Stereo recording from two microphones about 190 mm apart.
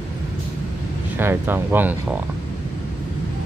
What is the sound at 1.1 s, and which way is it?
Speech, 10° right (ahead or behind).